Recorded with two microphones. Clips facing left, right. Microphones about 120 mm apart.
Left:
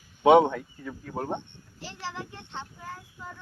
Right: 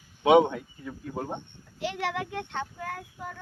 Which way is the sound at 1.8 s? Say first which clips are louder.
Right 7 dB; 65° right (ahead or behind).